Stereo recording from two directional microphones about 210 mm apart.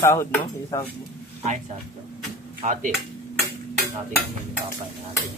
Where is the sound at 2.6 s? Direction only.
40° right (ahead or behind).